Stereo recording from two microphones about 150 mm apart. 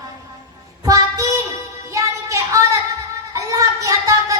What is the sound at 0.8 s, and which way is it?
Child singing, 20° right (ahead or behind).